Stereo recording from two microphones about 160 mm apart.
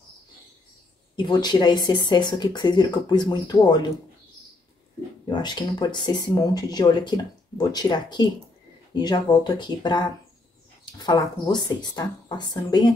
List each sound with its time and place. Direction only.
1.1 s speech: 25° left (ahead or behind)
5.2 s speech: 30° left (ahead or behind)